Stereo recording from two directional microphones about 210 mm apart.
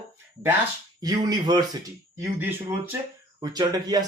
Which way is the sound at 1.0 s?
20° right (ahead or behind).